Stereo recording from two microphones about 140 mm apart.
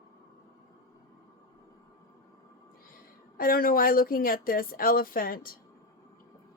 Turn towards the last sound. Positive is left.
turn(degrees=90)